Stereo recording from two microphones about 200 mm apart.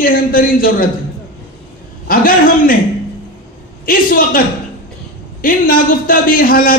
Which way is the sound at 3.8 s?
45° left (ahead or behind).